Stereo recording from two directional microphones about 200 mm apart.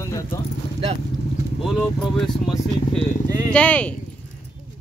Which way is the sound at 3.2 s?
15° right (ahead or behind).